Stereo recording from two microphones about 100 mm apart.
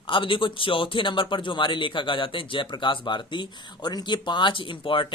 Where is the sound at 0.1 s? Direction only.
55° left (ahead or behind).